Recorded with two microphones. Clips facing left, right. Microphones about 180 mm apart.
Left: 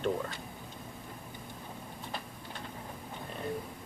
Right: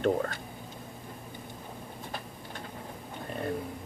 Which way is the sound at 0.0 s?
55° right (ahead or behind).